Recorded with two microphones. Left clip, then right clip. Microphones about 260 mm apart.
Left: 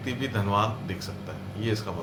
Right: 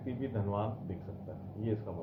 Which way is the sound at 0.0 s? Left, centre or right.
Centre.